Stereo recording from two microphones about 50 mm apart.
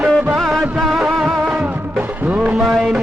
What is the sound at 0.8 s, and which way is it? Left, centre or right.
Music, centre.